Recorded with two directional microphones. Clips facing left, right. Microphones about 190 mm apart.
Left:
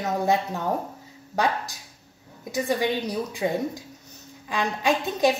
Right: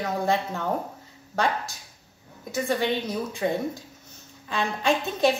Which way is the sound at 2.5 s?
15° left (ahead or behind).